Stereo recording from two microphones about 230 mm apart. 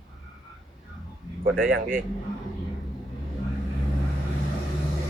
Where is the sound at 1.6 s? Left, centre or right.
Right.